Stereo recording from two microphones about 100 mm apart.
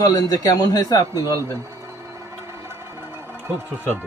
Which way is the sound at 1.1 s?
25° right (ahead or behind).